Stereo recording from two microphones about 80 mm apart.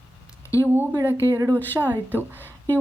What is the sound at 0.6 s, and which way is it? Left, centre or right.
Speech, right.